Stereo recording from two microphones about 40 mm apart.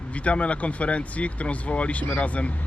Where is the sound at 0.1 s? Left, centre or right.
Left.